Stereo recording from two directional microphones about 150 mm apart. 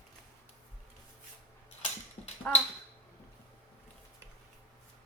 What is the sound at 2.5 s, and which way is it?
Speech, 5° left (ahead or behind).